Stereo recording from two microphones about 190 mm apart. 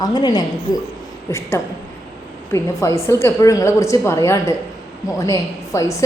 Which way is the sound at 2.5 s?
15° left (ahead or behind).